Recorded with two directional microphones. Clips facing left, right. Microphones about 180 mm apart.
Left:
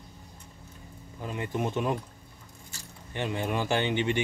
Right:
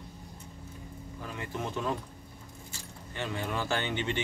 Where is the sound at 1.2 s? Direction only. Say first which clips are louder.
Left 6 dB; 20° left (ahead or behind).